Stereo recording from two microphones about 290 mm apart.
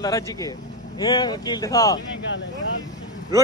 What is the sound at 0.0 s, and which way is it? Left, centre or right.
Speech, centre.